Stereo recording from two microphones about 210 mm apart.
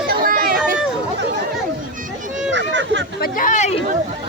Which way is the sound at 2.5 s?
60° right (ahead or behind).